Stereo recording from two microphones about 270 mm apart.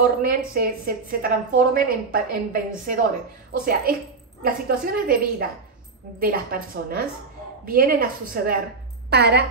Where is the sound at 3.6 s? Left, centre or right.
Right.